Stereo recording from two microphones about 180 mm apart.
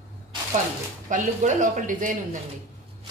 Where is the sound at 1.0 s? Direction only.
45° right (ahead or behind).